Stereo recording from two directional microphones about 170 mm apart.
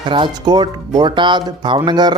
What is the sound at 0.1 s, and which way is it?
Speech, 25° right (ahead or behind).